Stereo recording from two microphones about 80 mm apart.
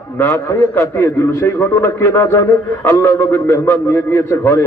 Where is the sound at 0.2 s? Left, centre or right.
Left.